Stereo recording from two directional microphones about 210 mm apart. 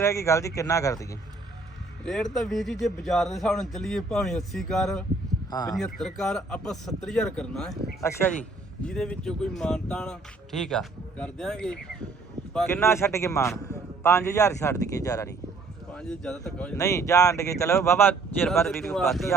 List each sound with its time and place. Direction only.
0.0 s a man's voice: 15° left (ahead or behind)
2.0 s speech: centre (ahead or behind)
5.5 s a man's voice: 20° left (ahead or behind)
5.7 s a man's voice: centre (ahead or behind)
15.9 s a man's voice: 5° left (ahead or behind)